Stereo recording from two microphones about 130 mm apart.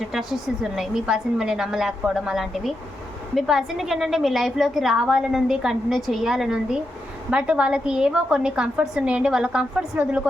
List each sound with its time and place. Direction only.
0.1 s a woman's voice: centre (ahead or behind)